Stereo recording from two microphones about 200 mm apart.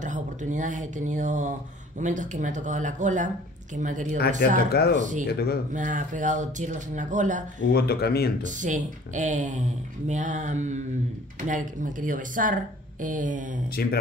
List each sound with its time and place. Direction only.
0.0 s speech: 40° right (ahead or behind)
4.4 s speech: 50° left (ahead or behind)
4.9 s speech: 40° right (ahead or behind)
5.2 s speech: 50° left (ahead or behind)
5.7 s speech: 40° right (ahead or behind)
7.6 s speech: 50° left (ahead or behind)
8.4 s speech: 40° right (ahead or behind)
13.8 s speech: 50° left (ahead or behind)